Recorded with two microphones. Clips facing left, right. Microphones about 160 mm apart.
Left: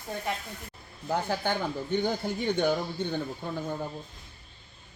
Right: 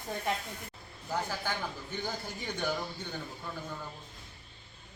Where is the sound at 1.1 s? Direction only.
60° left (ahead or behind).